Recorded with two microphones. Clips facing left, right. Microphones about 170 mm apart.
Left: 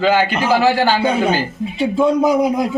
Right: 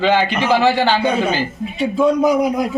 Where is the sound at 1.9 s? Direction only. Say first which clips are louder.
Even; 25° left (ahead or behind).